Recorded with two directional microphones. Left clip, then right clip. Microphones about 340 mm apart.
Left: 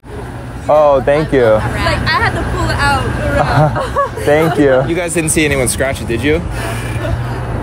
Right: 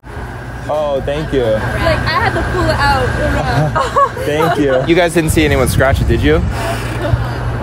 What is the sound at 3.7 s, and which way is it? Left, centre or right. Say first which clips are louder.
Speech: right 3 dB; right.